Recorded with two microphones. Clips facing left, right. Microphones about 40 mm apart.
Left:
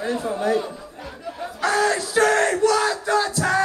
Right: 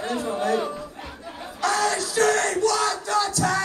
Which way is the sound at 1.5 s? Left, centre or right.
Left.